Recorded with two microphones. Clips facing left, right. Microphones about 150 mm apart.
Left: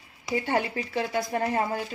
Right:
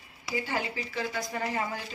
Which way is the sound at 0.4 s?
60° left (ahead or behind).